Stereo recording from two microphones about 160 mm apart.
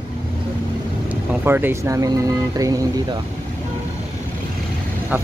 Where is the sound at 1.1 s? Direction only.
10° right (ahead or behind).